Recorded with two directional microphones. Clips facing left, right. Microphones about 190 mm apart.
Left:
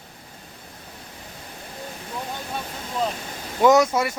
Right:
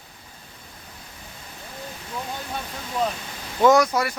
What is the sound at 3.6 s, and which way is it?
Speech, 20° left (ahead or behind).